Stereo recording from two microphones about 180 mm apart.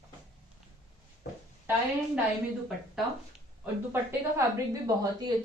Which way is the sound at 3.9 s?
15° right (ahead or behind).